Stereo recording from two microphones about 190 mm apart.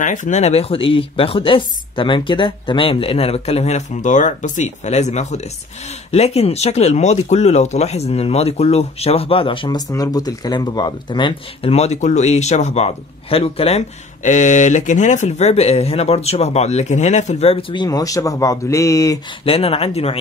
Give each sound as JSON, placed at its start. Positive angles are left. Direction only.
{"t": 0.0, "sound": "speech", "side_deg": 40}
{"t": 19.4, "sound": "speech", "side_deg": 30}